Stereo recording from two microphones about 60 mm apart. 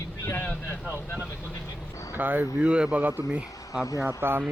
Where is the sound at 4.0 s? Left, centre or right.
Right.